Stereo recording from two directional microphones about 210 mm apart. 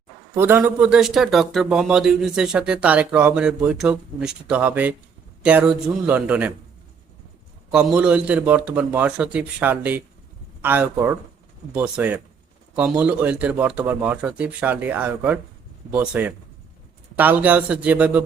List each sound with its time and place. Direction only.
0.3 s a man's voice: 10° right (ahead or behind)
7.7 s a man's voice: 5° right (ahead or behind)